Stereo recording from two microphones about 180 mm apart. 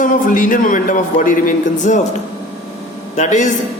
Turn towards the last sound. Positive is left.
turn(degrees=40)  # may be behind; listen again after turning